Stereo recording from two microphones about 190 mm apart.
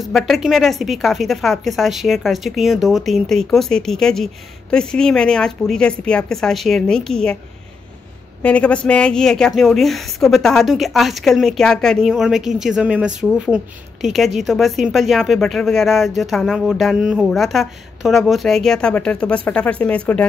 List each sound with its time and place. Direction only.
0.0 s a woman's voice: centre (ahead or behind)
8.4 s a woman's voice: 5° left (ahead or behind)